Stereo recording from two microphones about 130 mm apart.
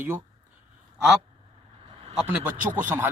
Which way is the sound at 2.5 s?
80° right.